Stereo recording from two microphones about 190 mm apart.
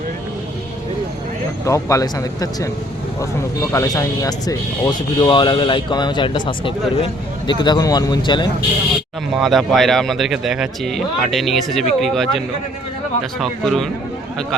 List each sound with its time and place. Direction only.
1.6 s speech: 15° left (ahead or behind)
9.3 s speech: centre (ahead or behind)
13.4 s speech: centre (ahead or behind)